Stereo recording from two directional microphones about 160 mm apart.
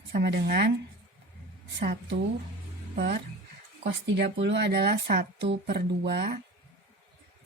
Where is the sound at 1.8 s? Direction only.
90° right.